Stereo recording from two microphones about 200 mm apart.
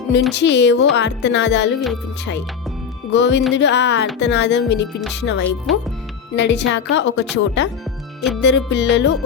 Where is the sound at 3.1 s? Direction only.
60° left (ahead or behind).